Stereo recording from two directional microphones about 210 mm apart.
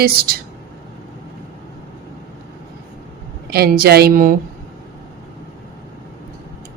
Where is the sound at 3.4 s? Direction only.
50° right (ahead or behind).